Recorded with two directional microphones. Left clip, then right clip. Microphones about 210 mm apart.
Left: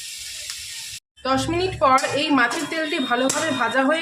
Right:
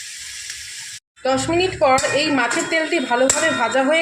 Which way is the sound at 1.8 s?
5° right (ahead or behind).